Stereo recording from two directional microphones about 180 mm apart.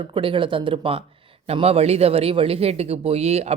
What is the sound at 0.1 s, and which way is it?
Speech, 30° right (ahead or behind).